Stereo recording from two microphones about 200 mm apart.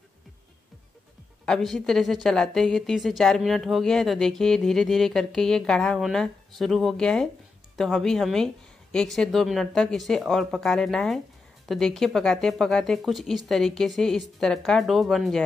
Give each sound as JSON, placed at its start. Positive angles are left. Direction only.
{"t": 1.4, "sound": "a woman's voice", "side_deg": 0}